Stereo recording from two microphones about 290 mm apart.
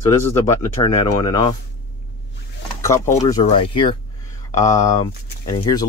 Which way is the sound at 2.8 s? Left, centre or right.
Centre.